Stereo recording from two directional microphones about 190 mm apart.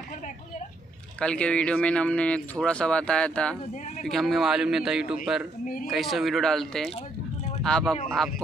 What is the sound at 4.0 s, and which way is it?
Speech, centre (ahead or behind).